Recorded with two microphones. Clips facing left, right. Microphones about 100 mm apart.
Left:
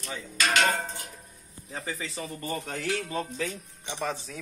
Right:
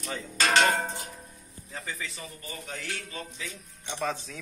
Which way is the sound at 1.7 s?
25° left (ahead or behind).